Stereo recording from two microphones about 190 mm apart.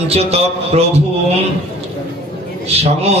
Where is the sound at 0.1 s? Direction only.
35° right (ahead or behind).